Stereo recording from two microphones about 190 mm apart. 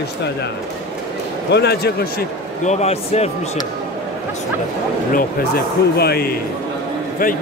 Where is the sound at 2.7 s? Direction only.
35° left (ahead or behind).